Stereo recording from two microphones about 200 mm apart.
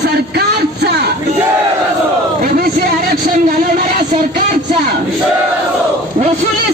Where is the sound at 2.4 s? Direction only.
45° right (ahead or behind).